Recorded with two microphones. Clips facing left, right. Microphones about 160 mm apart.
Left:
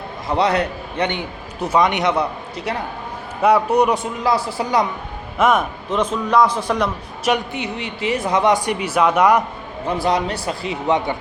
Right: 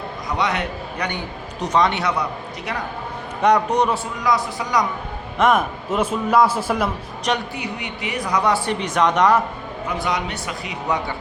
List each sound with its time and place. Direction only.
0.3 s a man's voice: 30° left (ahead or behind)
1.6 s speech: 10° left (ahead or behind)
3.4 s a man's voice: 5° left (ahead or behind); by 4.9 s 30° left (ahead or behind)
5.4 s a man's voice: centre (ahead or behind)
7.5 s speech: 25° left (ahead or behind); by 9.4 s 10° left (ahead or behind)
9.8 s a man's voice: 35° left (ahead or behind)